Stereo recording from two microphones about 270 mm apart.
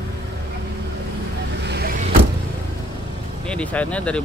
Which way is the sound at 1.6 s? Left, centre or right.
Right.